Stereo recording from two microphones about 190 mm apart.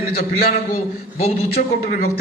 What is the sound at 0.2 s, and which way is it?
A man's voice, 50° left (ahead or behind).